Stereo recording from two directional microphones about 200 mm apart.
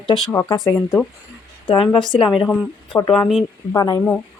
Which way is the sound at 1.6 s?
25° left (ahead or behind).